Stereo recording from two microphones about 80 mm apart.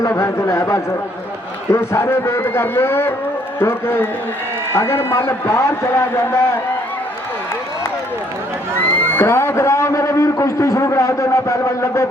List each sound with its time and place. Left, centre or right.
0.0 s a man's voice: left
8.8 s a man's voice: left